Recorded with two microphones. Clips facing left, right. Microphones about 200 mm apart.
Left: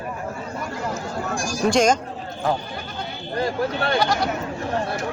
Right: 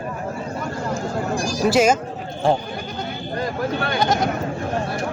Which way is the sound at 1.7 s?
5° right (ahead or behind).